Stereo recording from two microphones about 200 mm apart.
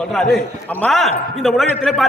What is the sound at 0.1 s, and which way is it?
A man's voice, centre (ahead or behind).